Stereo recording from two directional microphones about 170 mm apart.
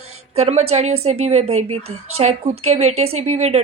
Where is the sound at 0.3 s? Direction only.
40° right (ahead or behind).